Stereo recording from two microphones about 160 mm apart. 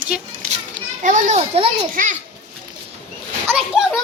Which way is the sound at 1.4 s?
35° right (ahead or behind).